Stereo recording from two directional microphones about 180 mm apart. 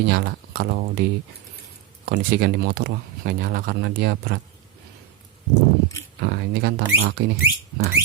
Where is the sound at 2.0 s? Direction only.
55° right (ahead or behind).